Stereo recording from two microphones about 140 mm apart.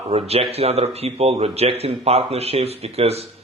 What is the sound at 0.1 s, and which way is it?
Speech, 45° right (ahead or behind).